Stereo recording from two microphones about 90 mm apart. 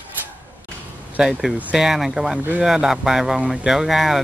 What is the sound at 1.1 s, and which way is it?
Speech, 5° right (ahead or behind).